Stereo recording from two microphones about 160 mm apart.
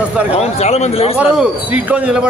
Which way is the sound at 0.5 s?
45° left (ahead or behind).